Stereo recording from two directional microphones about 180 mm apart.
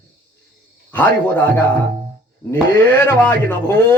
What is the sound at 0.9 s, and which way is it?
Speech, 10° left (ahead or behind).